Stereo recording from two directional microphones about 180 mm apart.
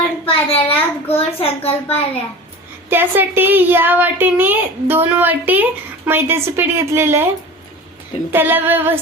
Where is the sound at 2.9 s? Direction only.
10° right (ahead or behind).